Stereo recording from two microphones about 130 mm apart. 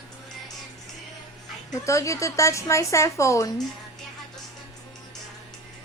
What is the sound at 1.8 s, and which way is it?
A woman's voice, 25° left (ahead or behind).